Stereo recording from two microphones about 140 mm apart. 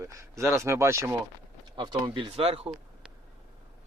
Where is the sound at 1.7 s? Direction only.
35° right (ahead or behind).